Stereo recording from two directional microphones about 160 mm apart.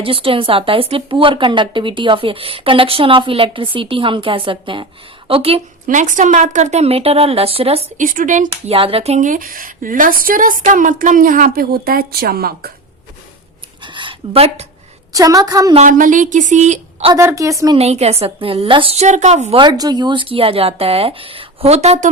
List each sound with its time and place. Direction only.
0.0 s a woman's voice: 35° right (ahead or behind)
5.9 s a woman's voice: 50° right (ahead or behind)
8.0 s a woman's voice: 55° right (ahead or behind)
8.7 s a woman's voice: 35° right (ahead or behind); by 12.7 s 70° right (ahead or behind)
13.8 s a woman's voice: 30° right (ahead or behind)
15.1 s a woman's voice: 20° right (ahead or behind)
15.7 s a woman's voice: 50° right (ahead or behind)
17.2 s a woman's voice: 20° right (ahead or behind)
17.7 s a woman's voice: 40° right (ahead or behind)
19.5 s a woman's voice: 25° right (ahead or behind); by 22.1 s 50° right (ahead or behind)